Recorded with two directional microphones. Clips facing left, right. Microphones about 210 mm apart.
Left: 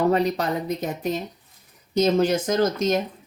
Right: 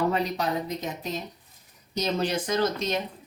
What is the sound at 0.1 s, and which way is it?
Speech, 55° left (ahead or behind).